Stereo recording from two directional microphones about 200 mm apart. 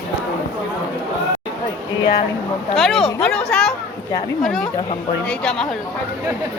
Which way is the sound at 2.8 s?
Centre (ahead or behind).